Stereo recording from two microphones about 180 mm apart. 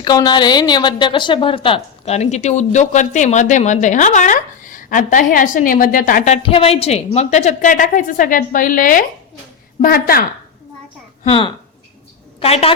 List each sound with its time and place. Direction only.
0.0 s a woman's voice: 20° left (ahead or behind); by 10.2 s 55° left (ahead or behind)
11.2 s a woman's voice: 30° left (ahead or behind)